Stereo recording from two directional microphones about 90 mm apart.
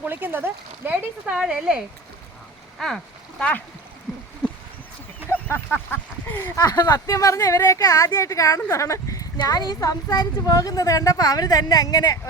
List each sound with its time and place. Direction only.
0.0 s speech: 20° right (ahead or behind)
2.7 s a sound: 5° left (ahead or behind)
5.3 s speech: 20° left (ahead or behind)
6.6 s speech: 45° left (ahead or behind)
9.4 s a woman's voice: 50° left (ahead or behind)